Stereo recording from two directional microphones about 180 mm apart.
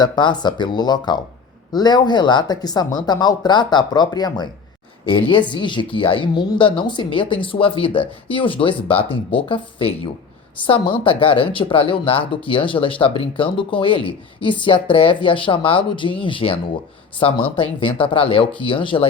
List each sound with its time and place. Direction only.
0.0 s speech: 25° left (ahead or behind)